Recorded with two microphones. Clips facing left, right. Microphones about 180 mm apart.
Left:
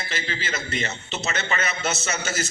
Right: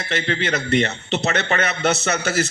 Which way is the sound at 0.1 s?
65° right (ahead or behind).